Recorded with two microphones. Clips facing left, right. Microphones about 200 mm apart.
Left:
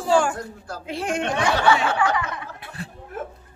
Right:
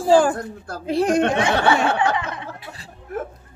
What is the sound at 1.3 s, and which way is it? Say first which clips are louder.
A child's voice: right 2 dB; 25° right (ahead or behind).